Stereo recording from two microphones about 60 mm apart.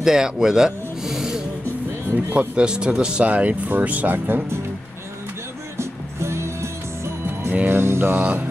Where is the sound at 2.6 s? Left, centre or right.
Centre.